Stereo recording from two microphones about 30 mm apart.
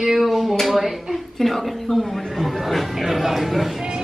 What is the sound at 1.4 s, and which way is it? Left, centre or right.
A woman's voice, centre.